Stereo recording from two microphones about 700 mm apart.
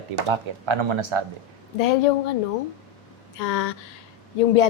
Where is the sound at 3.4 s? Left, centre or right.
Left.